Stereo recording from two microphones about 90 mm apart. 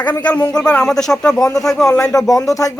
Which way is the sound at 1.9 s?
35° left (ahead or behind).